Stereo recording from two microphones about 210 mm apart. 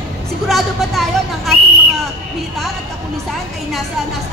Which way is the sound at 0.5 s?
Centre (ahead or behind).